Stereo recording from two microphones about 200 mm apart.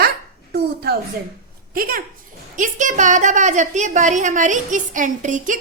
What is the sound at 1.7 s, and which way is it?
A woman's voice, 45° right (ahead or behind).